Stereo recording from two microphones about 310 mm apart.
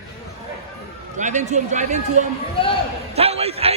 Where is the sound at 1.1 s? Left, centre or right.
Right.